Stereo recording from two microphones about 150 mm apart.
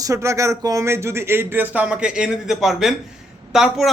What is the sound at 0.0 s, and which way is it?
A man's voice, 20° right (ahead or behind).